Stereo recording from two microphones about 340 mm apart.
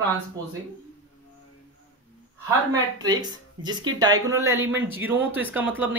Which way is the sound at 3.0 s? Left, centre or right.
Centre.